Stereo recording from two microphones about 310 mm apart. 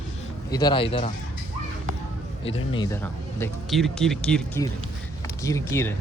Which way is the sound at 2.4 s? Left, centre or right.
Centre.